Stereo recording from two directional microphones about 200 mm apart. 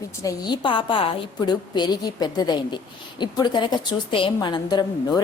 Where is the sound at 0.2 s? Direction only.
20° left (ahead or behind).